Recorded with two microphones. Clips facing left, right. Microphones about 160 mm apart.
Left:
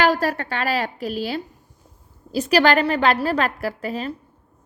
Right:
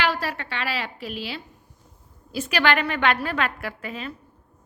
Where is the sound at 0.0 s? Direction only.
45° left (ahead or behind).